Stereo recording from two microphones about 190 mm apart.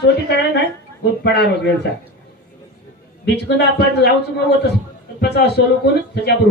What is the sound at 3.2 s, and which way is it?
A man's voice, 60° left (ahead or behind).